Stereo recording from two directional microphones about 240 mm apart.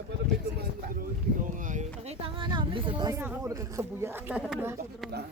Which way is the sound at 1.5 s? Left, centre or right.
Right.